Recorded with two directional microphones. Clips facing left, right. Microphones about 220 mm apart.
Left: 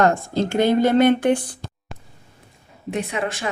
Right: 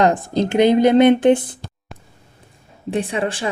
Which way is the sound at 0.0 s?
20° right (ahead or behind).